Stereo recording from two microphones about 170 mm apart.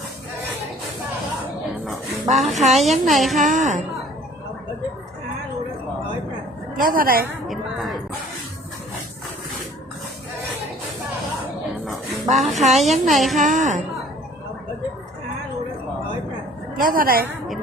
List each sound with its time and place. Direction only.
2.3 s a woman's voice: centre (ahead or behind)
3.4 s a woman's voice: 50° right (ahead or behind)
6.8 s a woman's voice: 60° right (ahead or behind)
7.4 s a woman's voice: centre (ahead or behind)
12.3 s a woman's voice: centre (ahead or behind)
13.4 s a woman's voice: 50° right (ahead or behind)
16.7 s a woman's voice: 55° right (ahead or behind)